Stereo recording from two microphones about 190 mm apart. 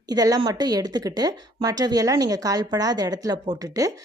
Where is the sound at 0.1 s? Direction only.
20° right (ahead or behind).